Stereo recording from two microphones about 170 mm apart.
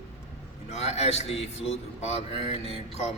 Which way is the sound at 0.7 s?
40° left (ahead or behind).